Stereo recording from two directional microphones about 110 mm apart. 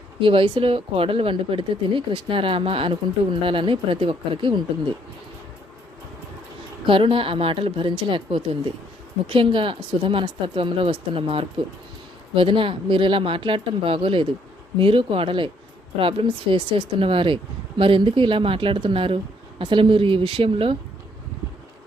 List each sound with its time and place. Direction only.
0.2 s speech: 55° right (ahead or behind)
6.8 s speech: 55° right (ahead or behind)